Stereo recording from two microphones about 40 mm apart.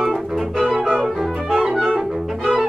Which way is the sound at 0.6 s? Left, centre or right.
Centre.